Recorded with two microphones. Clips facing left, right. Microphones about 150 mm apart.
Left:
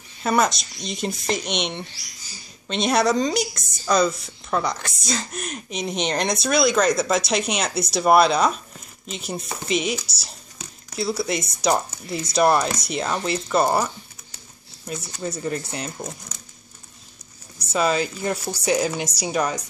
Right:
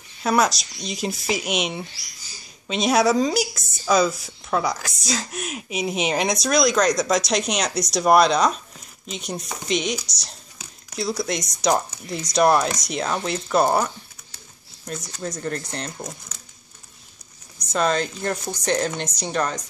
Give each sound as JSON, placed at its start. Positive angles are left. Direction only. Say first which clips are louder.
{"t": 0.2, "sound": "a woman's voice", "louder": "even", "side_deg": 0}
{"t": 17.6, "sound": "speech", "louder": "even", "side_deg": 5}